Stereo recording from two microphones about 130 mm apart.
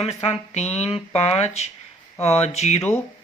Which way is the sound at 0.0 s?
50° left (ahead or behind).